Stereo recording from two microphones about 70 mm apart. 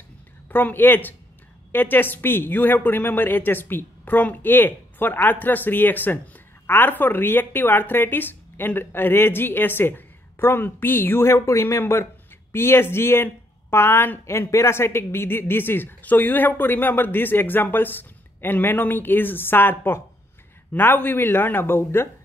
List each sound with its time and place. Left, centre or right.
0.5 s speech: left